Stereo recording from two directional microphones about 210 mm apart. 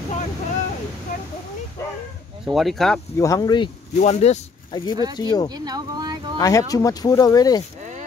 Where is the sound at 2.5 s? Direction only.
Centre (ahead or behind).